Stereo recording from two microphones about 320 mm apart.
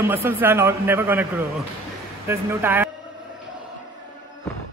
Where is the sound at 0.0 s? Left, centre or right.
Centre.